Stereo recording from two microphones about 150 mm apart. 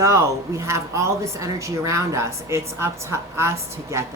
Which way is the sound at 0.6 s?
20° right (ahead or behind).